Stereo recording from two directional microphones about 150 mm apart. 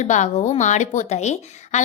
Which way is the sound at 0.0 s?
50° left (ahead or behind).